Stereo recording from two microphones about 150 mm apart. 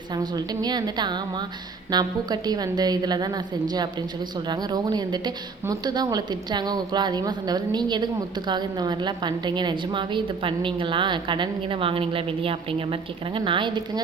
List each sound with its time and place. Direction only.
0.1 s a woman's voice: 25° right (ahead or behind)